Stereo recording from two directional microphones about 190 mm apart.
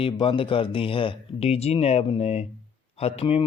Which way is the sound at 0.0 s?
25° left (ahead or behind).